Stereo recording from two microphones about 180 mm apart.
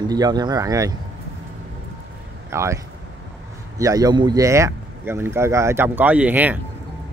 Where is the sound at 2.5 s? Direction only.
15° right (ahead or behind).